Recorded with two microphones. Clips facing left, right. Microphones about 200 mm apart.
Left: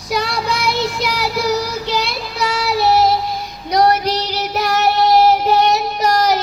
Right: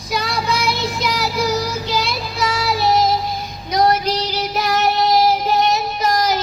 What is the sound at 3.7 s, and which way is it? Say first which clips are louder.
Child singing: left 2 dB; 65° left (ahead or behind).